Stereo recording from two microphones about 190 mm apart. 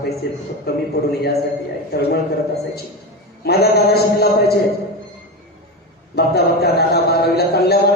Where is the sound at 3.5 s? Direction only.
55° left (ahead or behind).